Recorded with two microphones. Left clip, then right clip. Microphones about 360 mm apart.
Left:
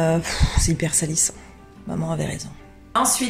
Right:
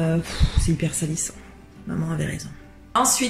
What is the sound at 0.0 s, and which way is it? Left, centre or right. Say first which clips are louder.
Speech: left 5 dB; centre.